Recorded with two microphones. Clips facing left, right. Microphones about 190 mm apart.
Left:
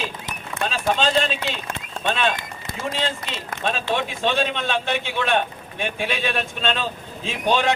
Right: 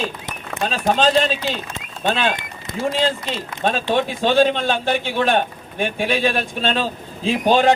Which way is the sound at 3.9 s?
35° right (ahead or behind).